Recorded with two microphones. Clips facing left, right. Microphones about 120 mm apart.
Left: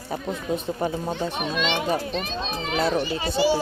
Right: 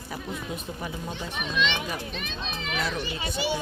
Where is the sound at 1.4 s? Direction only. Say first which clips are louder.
Left 3 dB; 45° left (ahead or behind).